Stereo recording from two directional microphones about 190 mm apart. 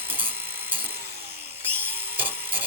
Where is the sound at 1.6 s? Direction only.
10° right (ahead or behind).